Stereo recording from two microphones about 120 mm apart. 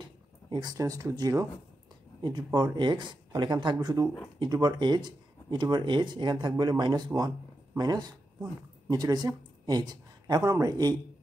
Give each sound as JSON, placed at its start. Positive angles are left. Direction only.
{"t": 0.5, "sound": "speech", "side_deg": -35}